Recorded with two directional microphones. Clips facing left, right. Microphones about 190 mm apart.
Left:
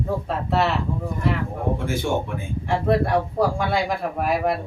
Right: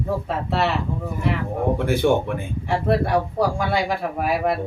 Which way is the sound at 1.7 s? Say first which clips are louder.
Right 6 dB; 65° right (ahead or behind).